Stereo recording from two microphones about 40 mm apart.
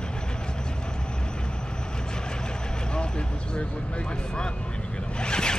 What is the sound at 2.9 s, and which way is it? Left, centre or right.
Speech, left.